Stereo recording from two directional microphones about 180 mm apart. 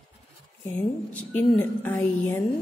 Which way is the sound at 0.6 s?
10° left (ahead or behind).